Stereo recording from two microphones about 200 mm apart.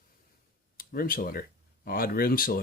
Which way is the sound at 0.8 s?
45° left (ahead or behind).